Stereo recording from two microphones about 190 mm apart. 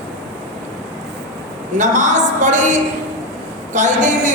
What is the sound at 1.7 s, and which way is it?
A woman's voice, 40° right (ahead or behind).